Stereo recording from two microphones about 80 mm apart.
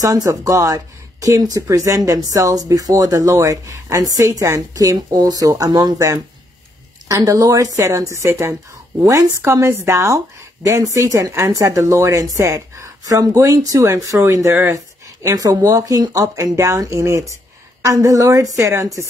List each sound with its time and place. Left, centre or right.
0.0 s speech: right
5.7 s speech: right
5.9 s a woman's voice: right
15.2 s speech: right